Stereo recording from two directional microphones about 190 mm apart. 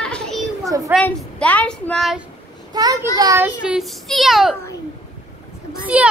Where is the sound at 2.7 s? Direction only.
20° right (ahead or behind); by 4.6 s centre (ahead or behind).